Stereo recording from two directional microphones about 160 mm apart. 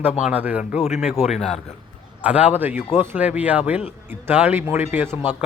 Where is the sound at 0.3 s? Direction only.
10° right (ahead or behind).